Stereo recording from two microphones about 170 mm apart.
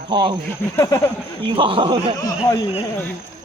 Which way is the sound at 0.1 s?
30° right (ahead or behind).